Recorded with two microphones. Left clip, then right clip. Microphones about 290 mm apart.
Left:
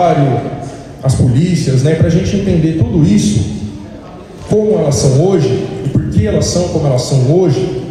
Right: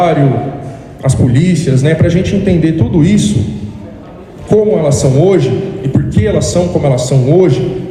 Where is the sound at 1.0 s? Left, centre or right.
Right.